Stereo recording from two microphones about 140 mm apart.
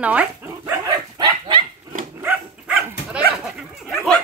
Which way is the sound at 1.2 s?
35° right (ahead or behind).